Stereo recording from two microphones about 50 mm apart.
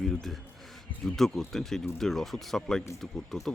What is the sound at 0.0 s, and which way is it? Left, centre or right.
Speech, centre.